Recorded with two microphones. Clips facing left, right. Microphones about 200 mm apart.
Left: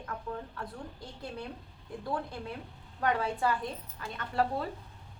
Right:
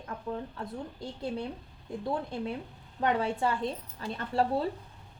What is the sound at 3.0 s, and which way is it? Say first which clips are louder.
A woman's voice: right 2 dB; 25° right (ahead or behind).